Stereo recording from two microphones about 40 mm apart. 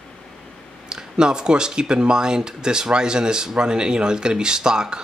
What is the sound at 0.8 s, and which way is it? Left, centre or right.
Speech, centre.